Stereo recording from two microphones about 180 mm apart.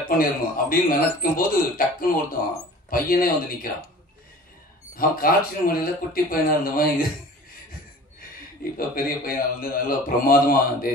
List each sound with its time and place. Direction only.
0.1 s a man's voice: 50° left (ahead or behind)
4.9 s a man's voice: 55° left (ahead or behind)
8.7 s a man's voice: 55° left (ahead or behind)